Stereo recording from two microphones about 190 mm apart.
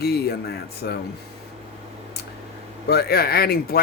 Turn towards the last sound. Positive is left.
turn(degrees=50)  # may be behind; listen again after turning